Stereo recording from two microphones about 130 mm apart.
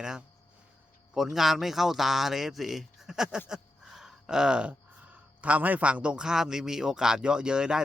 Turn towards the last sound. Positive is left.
turn(degrees=-5)  # may be behind; listen again after turning